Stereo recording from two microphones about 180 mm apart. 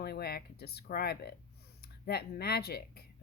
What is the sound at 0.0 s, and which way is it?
Speech, 60° left (ahead or behind).